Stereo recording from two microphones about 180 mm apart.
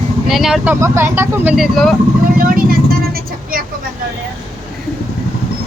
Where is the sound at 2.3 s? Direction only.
50° right (ahead or behind).